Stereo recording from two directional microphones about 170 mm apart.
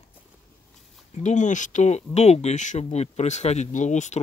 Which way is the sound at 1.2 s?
45° left (ahead or behind).